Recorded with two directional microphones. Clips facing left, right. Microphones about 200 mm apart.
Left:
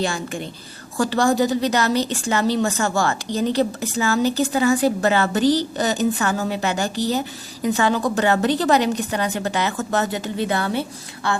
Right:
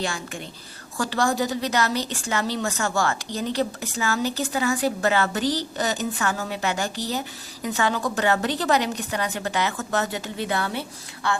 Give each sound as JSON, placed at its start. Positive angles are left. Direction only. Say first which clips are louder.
{"t": 0.9, "sound": "a woman's voice", "louder": "left 5 dB", "side_deg": 25}